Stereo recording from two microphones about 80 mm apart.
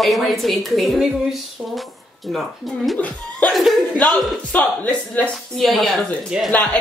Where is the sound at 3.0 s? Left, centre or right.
Centre.